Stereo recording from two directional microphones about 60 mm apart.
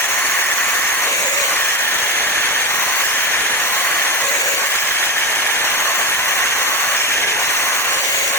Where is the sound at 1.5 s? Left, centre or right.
Left.